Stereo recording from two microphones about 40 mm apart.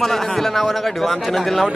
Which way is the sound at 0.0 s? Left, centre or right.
Centre.